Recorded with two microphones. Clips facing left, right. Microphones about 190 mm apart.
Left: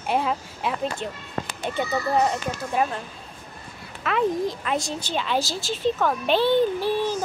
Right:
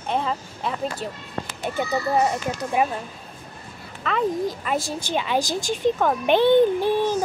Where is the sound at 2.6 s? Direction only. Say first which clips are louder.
Right 2 dB; 10° right (ahead or behind).